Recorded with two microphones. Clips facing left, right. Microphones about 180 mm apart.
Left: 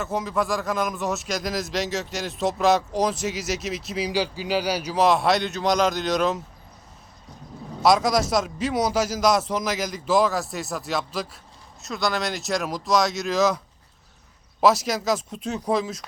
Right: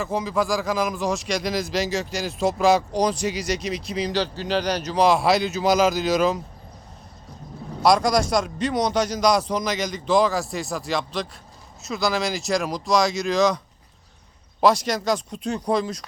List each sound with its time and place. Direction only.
0.0 s speech: centre (ahead or behind)
7.8 s speech: centre (ahead or behind)
14.6 s speech: 5° left (ahead or behind)